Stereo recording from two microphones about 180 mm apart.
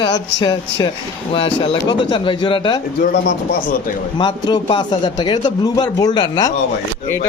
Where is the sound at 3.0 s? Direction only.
55° left (ahead or behind).